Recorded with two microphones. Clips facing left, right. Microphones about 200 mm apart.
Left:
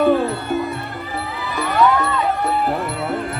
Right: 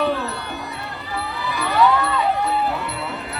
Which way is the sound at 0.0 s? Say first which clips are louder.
Left 6 dB; 50° left (ahead or behind).